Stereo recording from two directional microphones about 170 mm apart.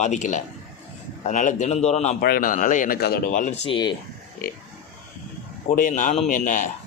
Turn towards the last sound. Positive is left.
turn(degrees=50)  # may be behind; listen again after turning